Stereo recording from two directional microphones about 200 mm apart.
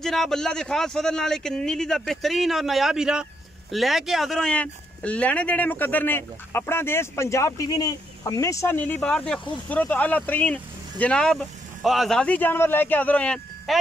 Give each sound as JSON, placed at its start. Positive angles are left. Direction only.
{"t": 0.0, "sound": "a man's voice", "side_deg": 0}